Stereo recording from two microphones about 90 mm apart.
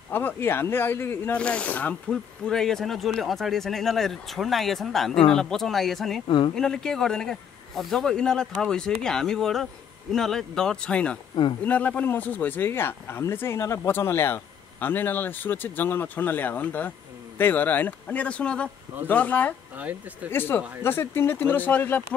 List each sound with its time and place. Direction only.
0.1 s speech: 25° left (ahead or behind)
1.4 s speech: 10° left (ahead or behind)
2.0 s speech: 5° left (ahead or behind)
6.2 s speech: 70° left (ahead or behind)
6.5 s speech: 5° left (ahead or behind)
19.7 s speech: 15° right (ahead or behind)
20.2 s speech: 25° left (ahead or behind)